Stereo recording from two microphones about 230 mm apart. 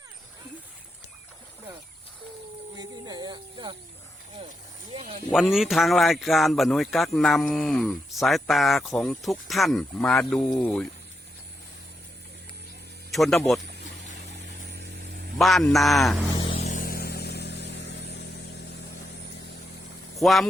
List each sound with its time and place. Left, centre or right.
2.7 s a sound: centre
5.3 s speech: centre
13.1 s speech: centre
14.8 s a sound: right
15.4 s speech: centre
16.4 s vehicle: left
20.1 s speech: centre